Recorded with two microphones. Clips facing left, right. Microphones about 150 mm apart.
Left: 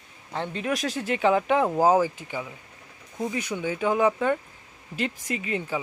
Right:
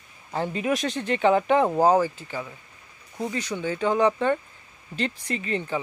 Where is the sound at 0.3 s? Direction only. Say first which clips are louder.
Right 3 dB; 5° right (ahead or behind).